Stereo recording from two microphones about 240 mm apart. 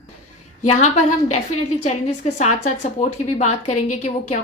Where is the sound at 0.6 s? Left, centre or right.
Left.